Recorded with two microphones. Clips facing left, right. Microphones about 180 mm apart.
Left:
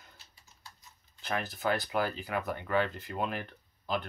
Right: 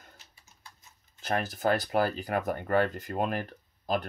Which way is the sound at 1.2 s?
45° right (ahead or behind).